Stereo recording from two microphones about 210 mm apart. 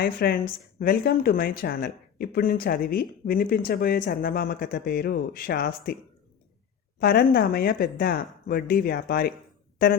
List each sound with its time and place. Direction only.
0.0 s speech: 45° left (ahead or behind)
7.0 s speech: 50° left (ahead or behind)